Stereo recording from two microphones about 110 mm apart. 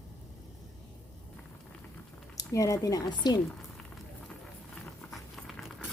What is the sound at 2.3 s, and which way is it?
Speech, 30° left (ahead or behind).